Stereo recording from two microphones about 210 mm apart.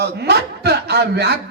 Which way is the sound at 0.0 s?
50° right (ahead or behind).